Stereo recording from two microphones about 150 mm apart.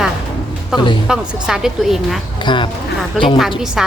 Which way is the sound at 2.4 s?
30° left (ahead or behind).